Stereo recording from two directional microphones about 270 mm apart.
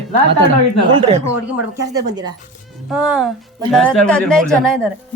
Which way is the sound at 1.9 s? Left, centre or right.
Centre.